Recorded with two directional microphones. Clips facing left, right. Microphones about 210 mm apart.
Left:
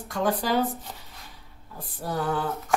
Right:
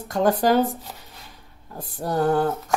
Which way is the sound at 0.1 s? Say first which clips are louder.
Right 6 dB; 45° right (ahead or behind).